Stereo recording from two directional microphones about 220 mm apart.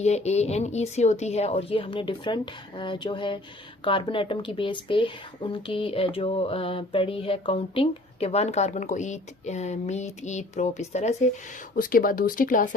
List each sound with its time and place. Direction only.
0.0 s speech: 30° left (ahead or behind)